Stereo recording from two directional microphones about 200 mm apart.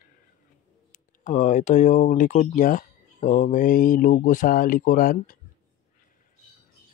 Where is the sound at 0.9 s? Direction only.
40° left (ahead or behind).